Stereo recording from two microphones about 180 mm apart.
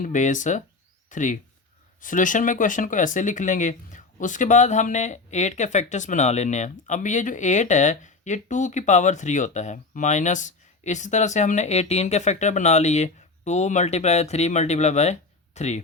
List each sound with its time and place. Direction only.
0.0 s speech: 45° left (ahead or behind)